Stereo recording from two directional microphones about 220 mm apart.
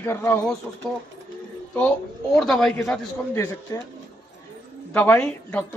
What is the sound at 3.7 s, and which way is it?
Speech, 15° left (ahead or behind).